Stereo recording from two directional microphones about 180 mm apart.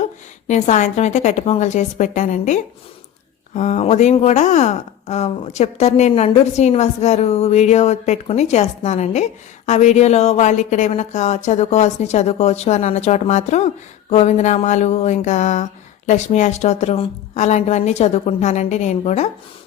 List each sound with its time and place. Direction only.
0.0 s speech: 40° left (ahead or behind)